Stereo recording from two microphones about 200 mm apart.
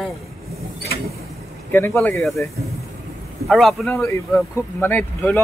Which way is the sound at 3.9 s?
15° left (ahead or behind).